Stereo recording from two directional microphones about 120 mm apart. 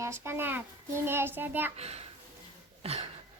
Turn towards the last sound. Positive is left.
turn(degrees=-60)  # may be behind; listen again after turning